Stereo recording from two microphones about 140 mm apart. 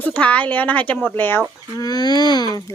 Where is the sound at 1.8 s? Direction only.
30° left (ahead or behind).